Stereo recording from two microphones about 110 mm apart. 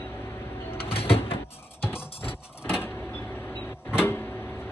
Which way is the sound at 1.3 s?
20° left (ahead or behind).